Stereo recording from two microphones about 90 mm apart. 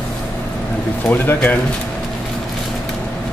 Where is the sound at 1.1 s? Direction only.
20° left (ahead or behind).